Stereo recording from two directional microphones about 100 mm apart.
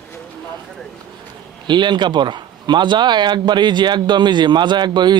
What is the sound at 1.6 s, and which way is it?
Speech, 50° right (ahead or behind).